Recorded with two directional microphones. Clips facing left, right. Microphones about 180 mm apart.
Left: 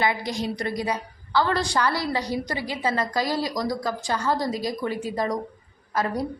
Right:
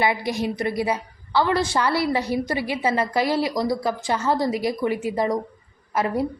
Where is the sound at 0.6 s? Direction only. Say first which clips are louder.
Right 3 dB; 25° right (ahead or behind).